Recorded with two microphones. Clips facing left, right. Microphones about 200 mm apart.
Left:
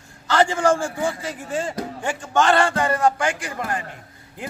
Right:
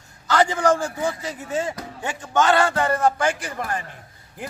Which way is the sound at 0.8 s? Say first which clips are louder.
Left 1 dB; 20° right (ahead or behind).